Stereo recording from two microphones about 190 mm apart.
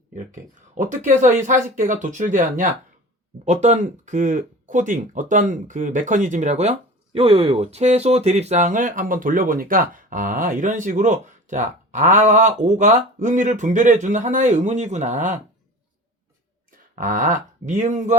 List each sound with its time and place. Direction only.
0.8 s speech: 40° right (ahead or behind)
16.9 s speech: 45° right (ahead or behind)